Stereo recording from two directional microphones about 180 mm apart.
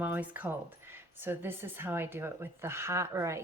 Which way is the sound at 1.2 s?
10° right (ahead or behind).